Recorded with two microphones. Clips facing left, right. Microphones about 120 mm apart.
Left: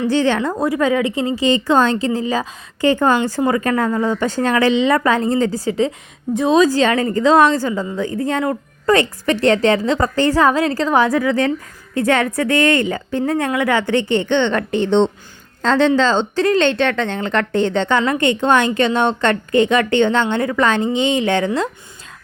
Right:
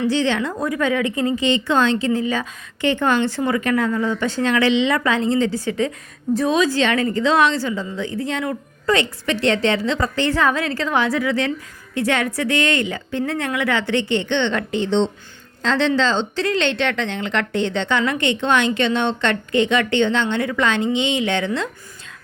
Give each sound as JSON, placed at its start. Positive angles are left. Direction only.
{"t": 0.1, "sound": "a woman's voice", "side_deg": 45}